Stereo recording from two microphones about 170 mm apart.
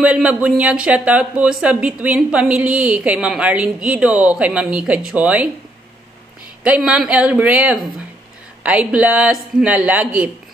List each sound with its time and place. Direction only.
0.0 s speech: 5° right (ahead or behind)
6.6 s speech: 5° right (ahead or behind)